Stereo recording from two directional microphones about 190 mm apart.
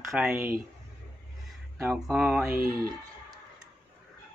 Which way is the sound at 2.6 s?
50° right (ahead or behind).